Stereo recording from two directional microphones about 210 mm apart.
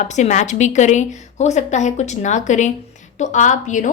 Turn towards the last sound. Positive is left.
turn(degrees=35)  # may be behind; listen again after turning